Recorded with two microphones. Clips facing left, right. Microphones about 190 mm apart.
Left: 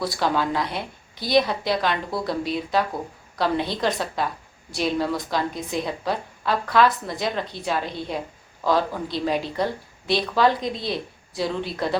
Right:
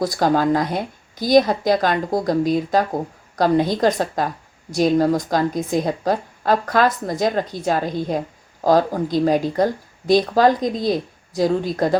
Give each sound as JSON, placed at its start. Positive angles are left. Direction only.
{"t": 0.0, "sound": "speech", "side_deg": -45}